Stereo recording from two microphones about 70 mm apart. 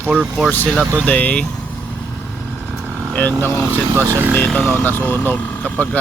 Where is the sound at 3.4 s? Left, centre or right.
Left.